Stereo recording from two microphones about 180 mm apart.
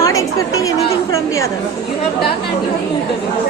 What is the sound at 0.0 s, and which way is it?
Chatter, 20° left (ahead or behind).